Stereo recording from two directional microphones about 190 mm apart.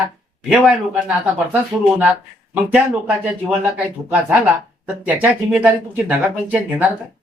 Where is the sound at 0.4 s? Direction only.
5° right (ahead or behind).